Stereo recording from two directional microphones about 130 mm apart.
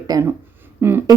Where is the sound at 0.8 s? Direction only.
20° right (ahead or behind).